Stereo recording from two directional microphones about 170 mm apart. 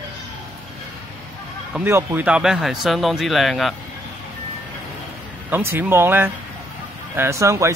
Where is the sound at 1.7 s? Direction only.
10° right (ahead or behind).